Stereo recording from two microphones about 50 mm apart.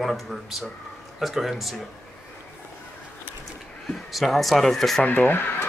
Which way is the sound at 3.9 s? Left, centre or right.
Centre.